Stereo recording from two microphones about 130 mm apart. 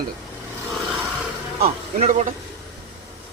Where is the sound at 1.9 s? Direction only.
65° right (ahead or behind).